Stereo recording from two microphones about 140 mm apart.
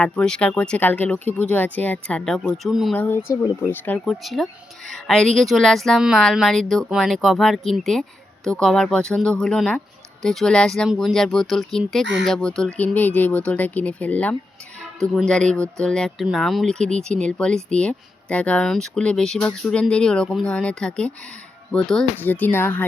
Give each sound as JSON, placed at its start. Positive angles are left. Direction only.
{"t": 0.0, "sound": "speech", "side_deg": 5}
{"t": 2.9, "sound": "speech", "side_deg": 15}